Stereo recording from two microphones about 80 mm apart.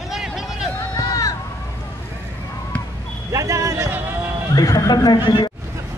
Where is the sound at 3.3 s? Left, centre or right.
Right.